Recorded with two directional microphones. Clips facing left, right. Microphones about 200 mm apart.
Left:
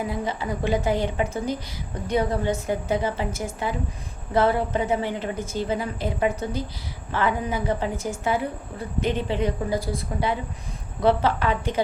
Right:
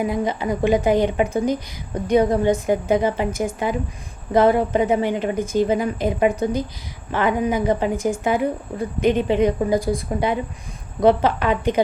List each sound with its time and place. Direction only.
0.0 s a woman's voice: 15° right (ahead or behind)